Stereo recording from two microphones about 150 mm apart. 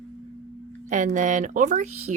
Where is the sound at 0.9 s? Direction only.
55° right (ahead or behind).